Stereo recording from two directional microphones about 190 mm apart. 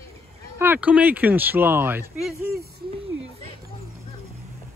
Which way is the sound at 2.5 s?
55° right (ahead or behind).